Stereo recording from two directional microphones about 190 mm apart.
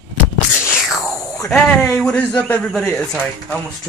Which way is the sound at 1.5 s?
5° left (ahead or behind).